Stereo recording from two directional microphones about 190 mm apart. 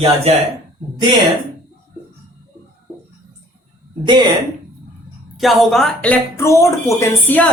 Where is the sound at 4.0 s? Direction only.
25° right (ahead or behind).